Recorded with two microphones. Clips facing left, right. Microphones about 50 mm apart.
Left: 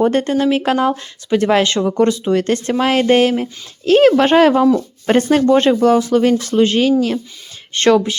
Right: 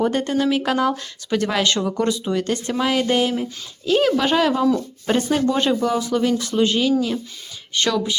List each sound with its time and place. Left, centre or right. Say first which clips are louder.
0.1 s speech: left 5 dB; left
2.3 s speech: left 6 dB; left
5.0 s speech: left 6 dB; left
5.5 s speech: left 8 dB; left